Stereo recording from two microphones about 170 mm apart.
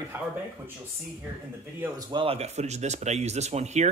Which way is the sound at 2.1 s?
35° right (ahead or behind).